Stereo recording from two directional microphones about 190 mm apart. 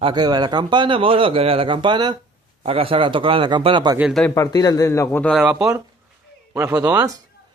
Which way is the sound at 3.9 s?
5° right (ahead or behind).